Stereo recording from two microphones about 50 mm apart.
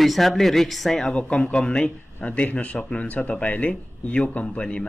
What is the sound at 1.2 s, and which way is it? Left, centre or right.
Speech, left.